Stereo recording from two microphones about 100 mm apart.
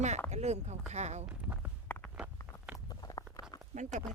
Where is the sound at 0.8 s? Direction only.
15° right (ahead or behind).